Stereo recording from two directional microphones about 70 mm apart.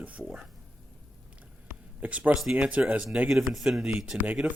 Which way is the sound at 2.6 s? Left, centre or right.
Centre.